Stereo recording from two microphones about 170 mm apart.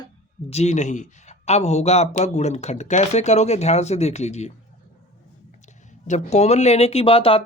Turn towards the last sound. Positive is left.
turn(degrees=35)  # may be behind; listen again after turning